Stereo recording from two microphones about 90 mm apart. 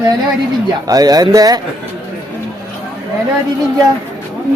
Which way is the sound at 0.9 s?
45° right (ahead or behind).